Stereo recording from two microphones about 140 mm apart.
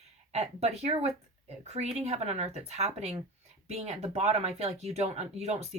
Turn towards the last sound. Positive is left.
turn(degrees=-50)  # may be behind; listen again after turning